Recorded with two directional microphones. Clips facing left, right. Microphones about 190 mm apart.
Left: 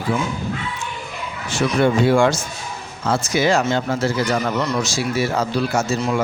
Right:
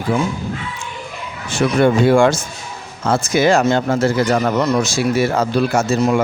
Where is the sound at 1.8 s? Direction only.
50° right (ahead or behind).